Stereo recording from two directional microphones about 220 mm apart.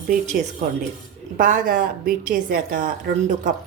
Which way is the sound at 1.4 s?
35° right (ahead or behind).